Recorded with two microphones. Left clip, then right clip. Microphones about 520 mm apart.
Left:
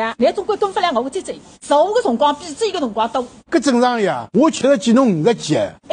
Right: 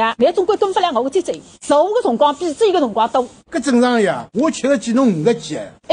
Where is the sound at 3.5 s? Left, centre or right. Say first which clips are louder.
Left 2 dB; left.